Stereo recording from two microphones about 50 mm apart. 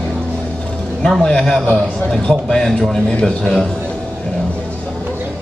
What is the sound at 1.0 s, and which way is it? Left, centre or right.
A man's voice, centre.